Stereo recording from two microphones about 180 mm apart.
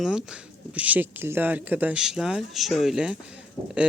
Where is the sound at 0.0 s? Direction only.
5° right (ahead or behind).